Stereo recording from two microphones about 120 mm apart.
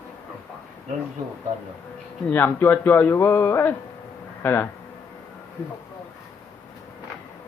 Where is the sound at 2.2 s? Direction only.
20° left (ahead or behind).